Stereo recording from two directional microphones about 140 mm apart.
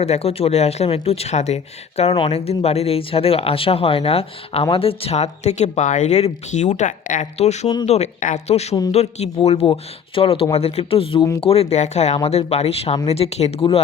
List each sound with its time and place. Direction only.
0.0 s speech: 50° left (ahead or behind)